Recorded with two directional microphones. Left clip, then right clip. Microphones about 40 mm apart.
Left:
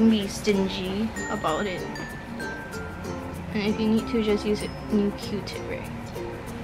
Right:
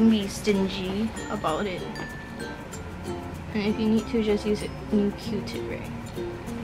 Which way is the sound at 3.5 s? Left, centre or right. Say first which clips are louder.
Even; centre.